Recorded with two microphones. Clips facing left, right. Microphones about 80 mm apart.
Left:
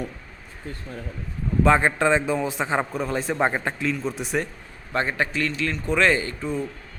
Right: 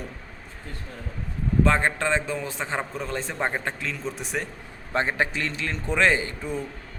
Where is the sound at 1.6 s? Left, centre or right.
Centre.